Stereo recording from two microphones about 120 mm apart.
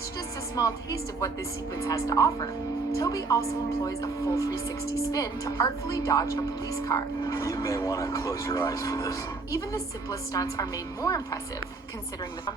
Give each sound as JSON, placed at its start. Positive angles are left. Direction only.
{"t": 0.5, "sound": "a woman's voice", "side_deg": 30}